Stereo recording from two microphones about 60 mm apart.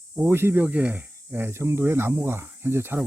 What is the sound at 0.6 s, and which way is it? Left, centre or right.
Speech, right.